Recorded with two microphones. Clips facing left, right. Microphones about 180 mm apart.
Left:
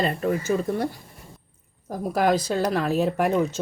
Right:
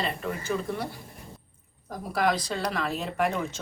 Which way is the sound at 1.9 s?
50° left (ahead or behind).